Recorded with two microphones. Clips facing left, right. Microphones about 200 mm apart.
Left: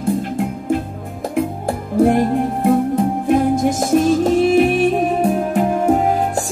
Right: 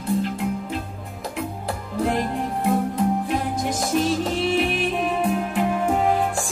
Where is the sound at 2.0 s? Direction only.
50° left (ahead or behind).